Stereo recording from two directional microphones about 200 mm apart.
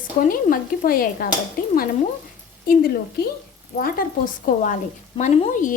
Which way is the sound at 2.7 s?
50° left (ahead or behind).